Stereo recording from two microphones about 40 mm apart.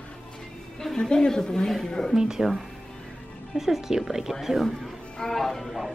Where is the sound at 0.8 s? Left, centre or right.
Centre.